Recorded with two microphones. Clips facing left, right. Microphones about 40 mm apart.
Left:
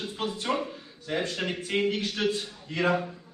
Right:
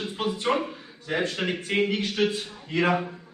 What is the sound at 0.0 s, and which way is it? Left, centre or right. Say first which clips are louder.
A man's voice: right 4 dB; right.